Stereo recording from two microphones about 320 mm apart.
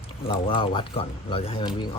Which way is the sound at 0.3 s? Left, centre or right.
Centre.